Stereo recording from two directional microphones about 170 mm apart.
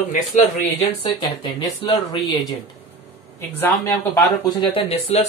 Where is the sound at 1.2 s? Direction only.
35° left (ahead or behind).